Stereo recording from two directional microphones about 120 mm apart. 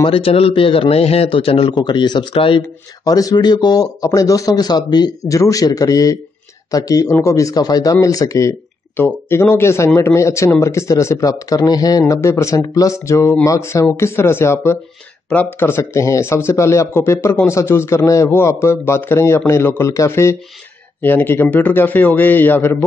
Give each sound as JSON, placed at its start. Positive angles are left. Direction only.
{"t": 0.0, "sound": "a man's voice", "side_deg": 50}
{"t": 1.8, "sound": "speech", "side_deg": 35}
{"t": 2.6, "sound": "a man's voice", "side_deg": 30}